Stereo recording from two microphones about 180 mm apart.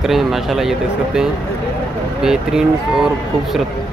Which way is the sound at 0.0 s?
Centre (ahead or behind).